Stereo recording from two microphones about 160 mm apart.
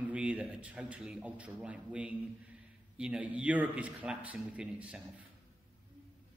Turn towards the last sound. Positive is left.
turn(degrees=-5)  # may be behind; listen again after turning